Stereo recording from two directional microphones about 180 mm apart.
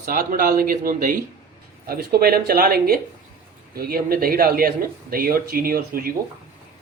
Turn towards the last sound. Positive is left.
turn(degrees=-55)  # may be behind; listen again after turning